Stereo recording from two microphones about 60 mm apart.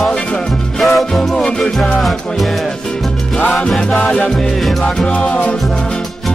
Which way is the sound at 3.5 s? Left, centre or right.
Centre.